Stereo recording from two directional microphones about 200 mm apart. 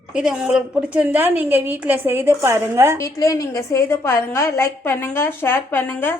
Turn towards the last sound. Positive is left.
turn(degrees=10)  # may be behind; listen again after turning